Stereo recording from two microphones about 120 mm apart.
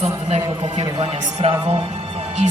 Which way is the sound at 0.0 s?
60° right (ahead or behind).